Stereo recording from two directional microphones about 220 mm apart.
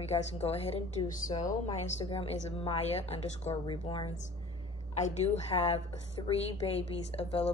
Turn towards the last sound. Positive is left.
turn(degrees=25)  # may be behind; listen again after turning